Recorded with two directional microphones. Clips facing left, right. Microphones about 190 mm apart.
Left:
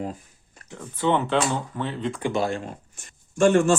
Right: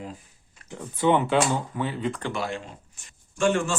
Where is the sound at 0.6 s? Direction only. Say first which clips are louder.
Right 2 dB; 45° left (ahead or behind).